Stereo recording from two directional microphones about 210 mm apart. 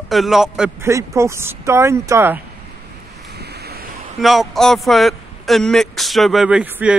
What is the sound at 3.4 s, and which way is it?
Waves, 50° right (ahead or behind).